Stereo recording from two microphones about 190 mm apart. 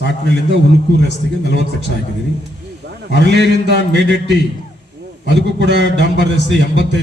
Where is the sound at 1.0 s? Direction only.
65° right (ahead or behind).